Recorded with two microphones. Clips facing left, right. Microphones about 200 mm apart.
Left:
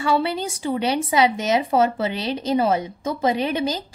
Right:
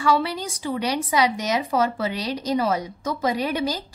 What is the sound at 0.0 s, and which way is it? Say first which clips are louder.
Speech: left 1 dB; 25° left (ahead or behind).